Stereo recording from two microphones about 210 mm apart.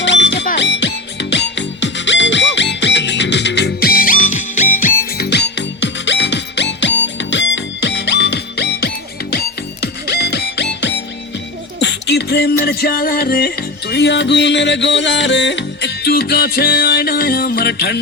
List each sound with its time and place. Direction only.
0.0 s music: 60° left (ahead or behind)